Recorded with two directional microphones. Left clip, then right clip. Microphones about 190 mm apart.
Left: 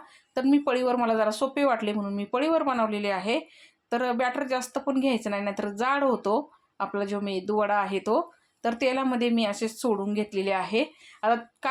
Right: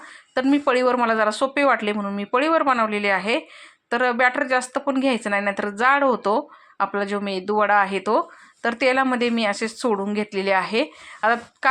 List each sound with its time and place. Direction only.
0.3 s speech: 10° right (ahead or behind)